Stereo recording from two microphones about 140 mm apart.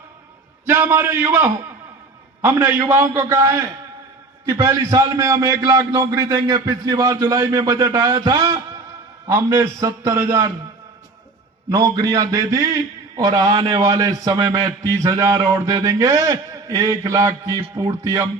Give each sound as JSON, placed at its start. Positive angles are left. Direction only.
{"t": 0.6, "sound": "a man's voice", "side_deg": -15}
{"t": 11.7, "sound": "a man's voice", "side_deg": -25}